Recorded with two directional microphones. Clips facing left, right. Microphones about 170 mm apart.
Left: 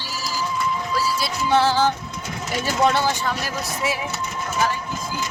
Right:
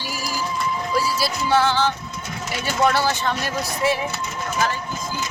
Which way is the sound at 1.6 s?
40° left (ahead or behind).